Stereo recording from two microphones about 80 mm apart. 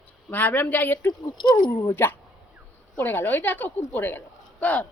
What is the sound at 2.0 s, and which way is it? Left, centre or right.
Speech, left.